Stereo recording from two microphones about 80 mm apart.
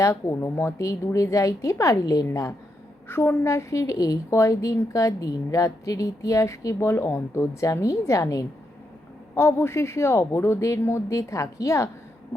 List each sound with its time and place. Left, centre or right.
0.0 s a woman's voice: left
3.1 s a woman's voice: left
9.3 s a woman's voice: left